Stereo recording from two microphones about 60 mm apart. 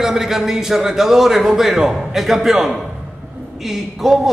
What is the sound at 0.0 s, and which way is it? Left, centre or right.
A man's voice, centre.